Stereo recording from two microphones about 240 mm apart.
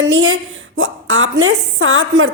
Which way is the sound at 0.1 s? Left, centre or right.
Right.